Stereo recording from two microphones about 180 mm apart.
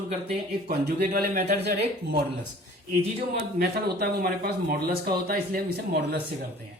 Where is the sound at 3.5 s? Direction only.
55° right (ahead or behind).